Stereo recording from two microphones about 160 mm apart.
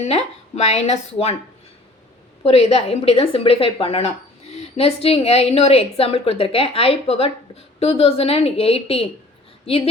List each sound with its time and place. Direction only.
0.0 s a woman's voice: 40° left (ahead or behind)
2.4 s a woman's voice: 40° left (ahead or behind)